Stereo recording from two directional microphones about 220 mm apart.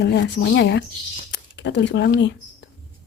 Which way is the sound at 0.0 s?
50° left (ahead or behind).